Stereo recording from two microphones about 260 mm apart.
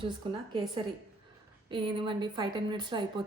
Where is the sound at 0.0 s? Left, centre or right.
Centre.